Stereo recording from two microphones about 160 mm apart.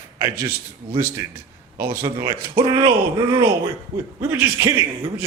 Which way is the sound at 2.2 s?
25° right (ahead or behind).